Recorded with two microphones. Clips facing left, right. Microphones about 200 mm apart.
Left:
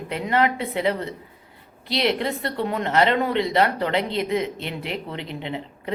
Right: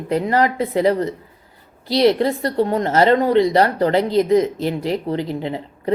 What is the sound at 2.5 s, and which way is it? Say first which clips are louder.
A woman's voice: right 5 dB; 35° right (ahead or behind).